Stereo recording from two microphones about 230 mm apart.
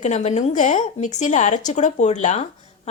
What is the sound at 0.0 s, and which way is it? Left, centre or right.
Speech, left.